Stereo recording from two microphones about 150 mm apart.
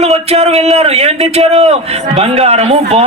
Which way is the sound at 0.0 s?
45° right (ahead or behind).